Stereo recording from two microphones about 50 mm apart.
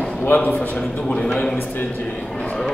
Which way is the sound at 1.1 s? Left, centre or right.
Centre.